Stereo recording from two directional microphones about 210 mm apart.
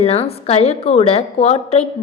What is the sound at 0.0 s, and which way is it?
A woman's voice, 30° left (ahead or behind).